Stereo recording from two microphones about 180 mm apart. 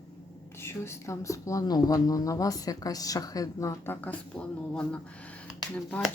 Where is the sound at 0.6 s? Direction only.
15° left (ahead or behind).